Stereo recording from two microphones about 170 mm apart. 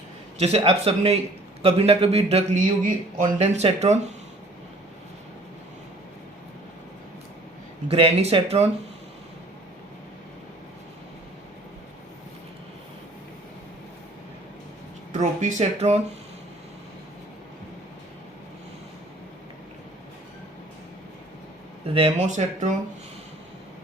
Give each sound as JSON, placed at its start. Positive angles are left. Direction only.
{"t": 0.3, "sound": "speech", "side_deg": -35}
{"t": 2.6, "sound": "speech", "side_deg": -50}
{"t": 7.9, "sound": "speech", "side_deg": -35}
{"t": 15.1, "sound": "speech", "side_deg": -45}
{"t": 21.9, "sound": "speech", "side_deg": -35}